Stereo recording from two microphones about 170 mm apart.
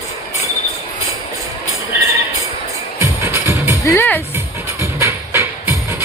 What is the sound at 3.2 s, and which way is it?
Music, 15° right (ahead or behind).